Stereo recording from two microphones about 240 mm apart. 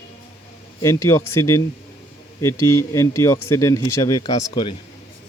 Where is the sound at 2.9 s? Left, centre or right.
Centre.